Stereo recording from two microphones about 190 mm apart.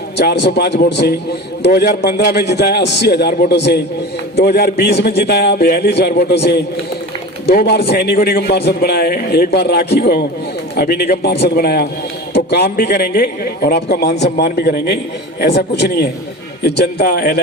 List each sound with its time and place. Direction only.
0.2 s a man's voice: 60° left (ahead or behind)